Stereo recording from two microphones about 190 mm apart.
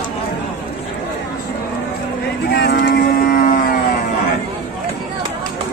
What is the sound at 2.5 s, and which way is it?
Cattle, 55° left (ahead or behind).